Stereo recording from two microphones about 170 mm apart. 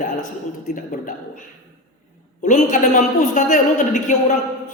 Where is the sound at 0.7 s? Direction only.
50° left (ahead or behind).